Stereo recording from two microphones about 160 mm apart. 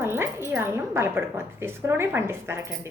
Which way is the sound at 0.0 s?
15° right (ahead or behind).